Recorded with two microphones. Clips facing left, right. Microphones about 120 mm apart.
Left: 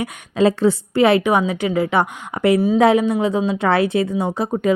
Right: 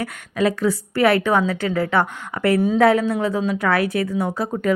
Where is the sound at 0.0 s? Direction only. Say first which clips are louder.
Left 4 dB; 25° left (ahead or behind).